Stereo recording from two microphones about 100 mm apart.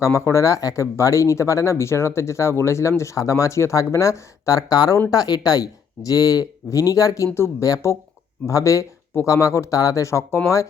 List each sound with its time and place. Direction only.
0.0 s speech: 25° left (ahead or behind)